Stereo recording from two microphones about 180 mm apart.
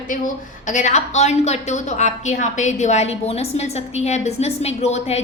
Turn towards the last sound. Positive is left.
turn(degrees=35)  # may be behind; listen again after turning